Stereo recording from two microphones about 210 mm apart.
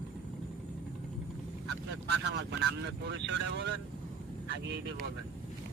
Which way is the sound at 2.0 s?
55° right (ahead or behind).